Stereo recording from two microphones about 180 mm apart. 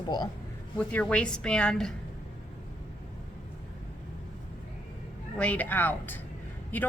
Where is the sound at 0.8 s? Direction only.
10° left (ahead or behind).